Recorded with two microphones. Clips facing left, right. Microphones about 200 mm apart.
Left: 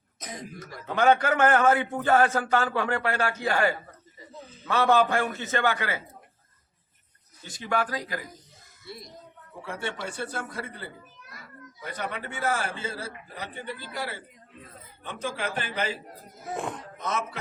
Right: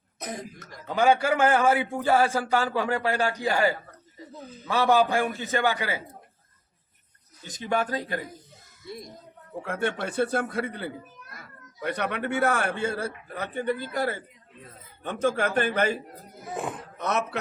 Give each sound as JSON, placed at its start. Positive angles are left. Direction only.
{"t": 0.9, "sound": "a man's voice", "side_deg": -10}
{"t": 7.4, "sound": "speech", "side_deg": -20}
{"t": 9.6, "sound": "a child's voice", "side_deg": -55}
{"t": 16.6, "sound": "a sound", "side_deg": -5}
{"t": 17.0, "sound": "speech", "side_deg": -65}